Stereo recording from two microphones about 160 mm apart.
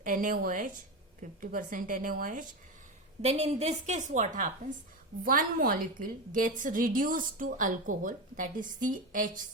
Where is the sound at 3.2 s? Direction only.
45° right (ahead or behind).